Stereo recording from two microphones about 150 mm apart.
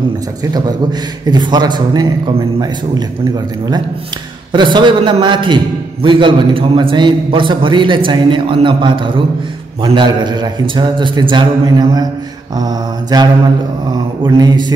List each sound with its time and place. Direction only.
0.4 s a man's voice: 25° right (ahead or behind)
4.5 s a man's voice: 30° right (ahead or behind)